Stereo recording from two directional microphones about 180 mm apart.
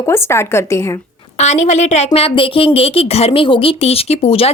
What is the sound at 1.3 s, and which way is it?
A woman's voice, 40° left (ahead or behind).